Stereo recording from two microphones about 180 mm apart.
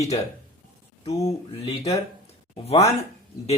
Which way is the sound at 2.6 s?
35° left (ahead or behind).